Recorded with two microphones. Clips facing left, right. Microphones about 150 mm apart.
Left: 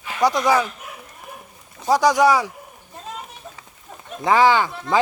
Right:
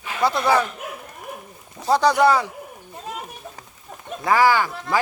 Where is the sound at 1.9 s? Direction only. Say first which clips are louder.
Left 1 dB; 10° left (ahead or behind).